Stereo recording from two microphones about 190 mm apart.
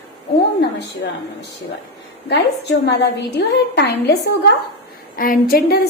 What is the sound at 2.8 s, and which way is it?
A woman's voice, 60° left (ahead or behind).